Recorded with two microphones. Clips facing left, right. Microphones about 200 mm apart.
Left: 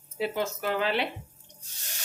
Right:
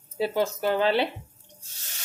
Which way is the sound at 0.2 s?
35° right (ahead or behind).